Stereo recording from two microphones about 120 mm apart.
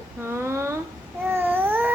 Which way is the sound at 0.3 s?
20° right (ahead or behind).